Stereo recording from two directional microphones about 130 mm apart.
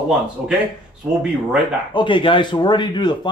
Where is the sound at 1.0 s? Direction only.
10° right (ahead or behind).